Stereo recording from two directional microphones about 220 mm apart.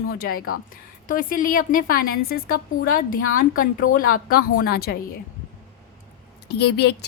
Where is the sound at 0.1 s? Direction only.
40° left (ahead or behind).